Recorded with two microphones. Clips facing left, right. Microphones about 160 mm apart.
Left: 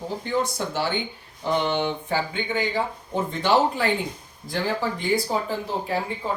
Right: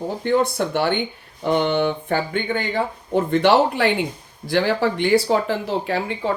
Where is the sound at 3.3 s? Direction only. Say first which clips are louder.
Right 5 dB; 70° right (ahead or behind).